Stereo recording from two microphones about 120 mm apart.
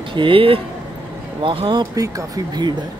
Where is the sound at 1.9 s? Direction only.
30° right (ahead or behind).